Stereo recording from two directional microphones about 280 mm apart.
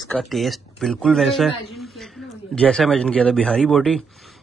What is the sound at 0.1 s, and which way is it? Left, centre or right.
Speech, centre.